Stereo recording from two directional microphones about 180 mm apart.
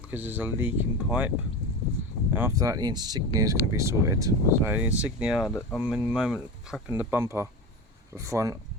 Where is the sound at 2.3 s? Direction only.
15° right (ahead or behind).